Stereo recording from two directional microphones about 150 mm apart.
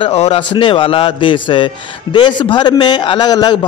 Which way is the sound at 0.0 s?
40° left (ahead or behind).